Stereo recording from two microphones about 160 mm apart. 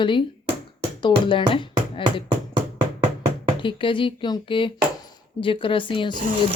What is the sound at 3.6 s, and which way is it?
Speech, 30° left (ahead or behind).